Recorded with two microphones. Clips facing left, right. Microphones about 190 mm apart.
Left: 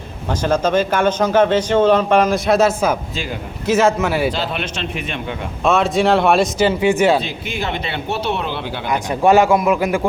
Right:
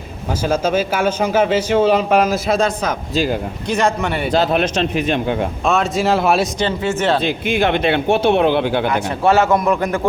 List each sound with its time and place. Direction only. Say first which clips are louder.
0.4 s a man's voice: left 1 dB; 10° right (ahead or behind)
4.3 s speech: right 7 dB; 45° right (ahead or behind)
5.6 s a man's voice: left 3 dB; centre (ahead or behind)
6.7 s a man's voice: left 3 dB; 10° left (ahead or behind)
7.6 s speech: right 8 dB; 55° right (ahead or behind)
8.9 s a man's voice: left 2 dB; 15° left (ahead or behind)